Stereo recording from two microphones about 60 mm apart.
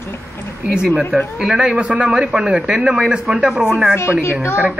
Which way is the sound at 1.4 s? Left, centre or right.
Centre.